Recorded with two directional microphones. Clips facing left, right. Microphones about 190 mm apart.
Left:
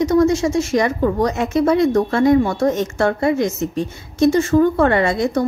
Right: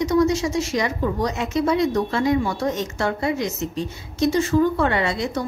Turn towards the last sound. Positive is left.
turn(degrees=50)  # may be behind; listen again after turning